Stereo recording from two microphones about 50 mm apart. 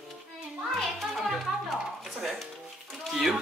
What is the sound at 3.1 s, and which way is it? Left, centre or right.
Chicken, centre.